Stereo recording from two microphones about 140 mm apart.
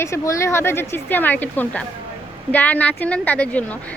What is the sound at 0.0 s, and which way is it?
A woman's voice, 20° left (ahead or behind).